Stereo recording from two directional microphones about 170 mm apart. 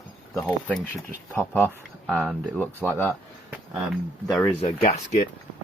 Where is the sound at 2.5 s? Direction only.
10° left (ahead or behind).